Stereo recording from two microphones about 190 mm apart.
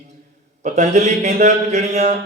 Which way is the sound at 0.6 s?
40° right (ahead or behind).